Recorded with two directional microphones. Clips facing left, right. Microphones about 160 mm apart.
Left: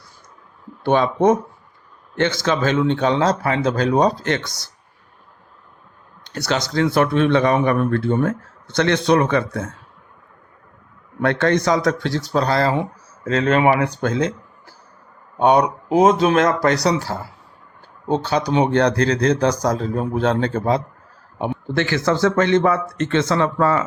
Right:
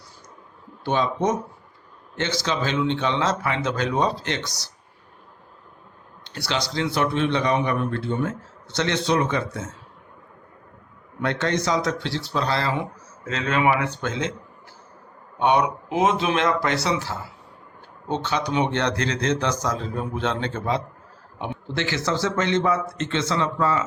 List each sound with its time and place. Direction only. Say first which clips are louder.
0.9 s speech: left 7 dB; 55° left (ahead or behind)
6.3 s speech: left 6 dB; 45° left (ahead or behind)
11.2 s speech: left 6 dB; 55° left (ahead or behind); by 14.3 s 40° left (ahead or behind)
15.4 s speech: left 5 dB; 35° left (ahead or behind)
21.7 s speech: left 6 dB; 50° left (ahead or behind)